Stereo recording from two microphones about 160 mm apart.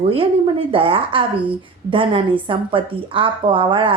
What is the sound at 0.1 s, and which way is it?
A woman's voice, 35° right (ahead or behind).